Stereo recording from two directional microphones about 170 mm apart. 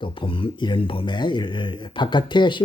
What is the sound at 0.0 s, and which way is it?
Speech, 30° left (ahead or behind).